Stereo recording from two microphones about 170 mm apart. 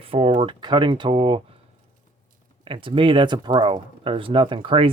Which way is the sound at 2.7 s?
30° right (ahead or behind).